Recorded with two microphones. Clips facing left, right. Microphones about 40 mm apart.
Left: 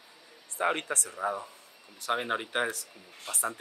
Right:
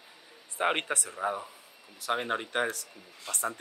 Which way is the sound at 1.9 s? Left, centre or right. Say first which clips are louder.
Even; centre.